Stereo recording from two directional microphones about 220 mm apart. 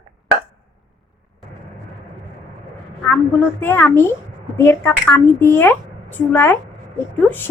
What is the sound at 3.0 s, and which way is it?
A woman's voice, 10° left (ahead or behind).